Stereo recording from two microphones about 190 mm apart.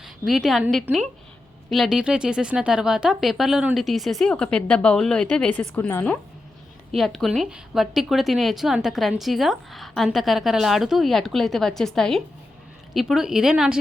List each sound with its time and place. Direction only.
0.0 s a woman's voice: centre (ahead or behind)